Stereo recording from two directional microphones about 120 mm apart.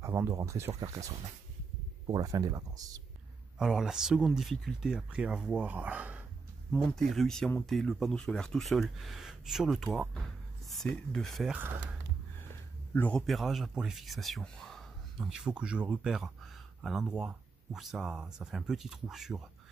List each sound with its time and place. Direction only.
0.0 s speech: 25° right (ahead or behind)
3.5 s speech: 5° right (ahead or behind)
6.7 s speech: centre (ahead or behind)
11.5 s speech: 15° right (ahead or behind)
12.9 s speech: 15° left (ahead or behind)
13.2 s speech: centre (ahead or behind)